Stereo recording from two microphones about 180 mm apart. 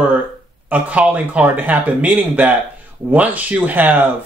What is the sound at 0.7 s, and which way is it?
Speech, 10° right (ahead or behind).